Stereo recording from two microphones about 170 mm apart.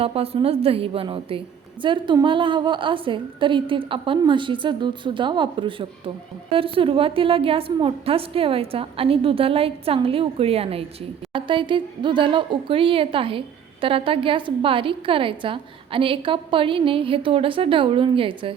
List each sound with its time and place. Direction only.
0.0 s a woman's voice: 35° right (ahead or behind)